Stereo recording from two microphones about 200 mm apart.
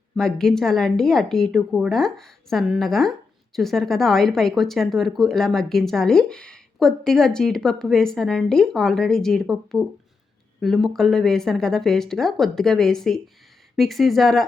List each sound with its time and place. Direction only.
0.2 s a woman's voice: 5° left (ahead or behind)